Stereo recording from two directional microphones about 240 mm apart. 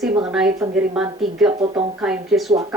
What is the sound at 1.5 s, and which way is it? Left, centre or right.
Speech, right.